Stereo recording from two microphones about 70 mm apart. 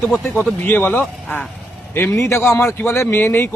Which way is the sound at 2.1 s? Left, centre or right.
Left.